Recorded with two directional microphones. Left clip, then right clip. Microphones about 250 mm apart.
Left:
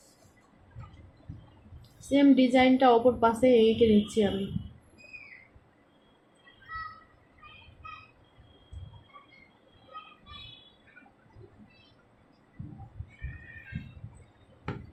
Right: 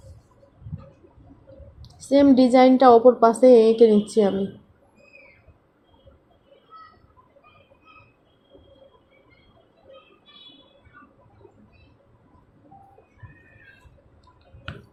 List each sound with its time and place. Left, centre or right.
2.0 s a woman's voice: right
2.7 s a woman's voice: centre